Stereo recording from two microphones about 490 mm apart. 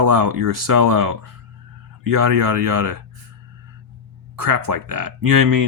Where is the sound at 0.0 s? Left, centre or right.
Right.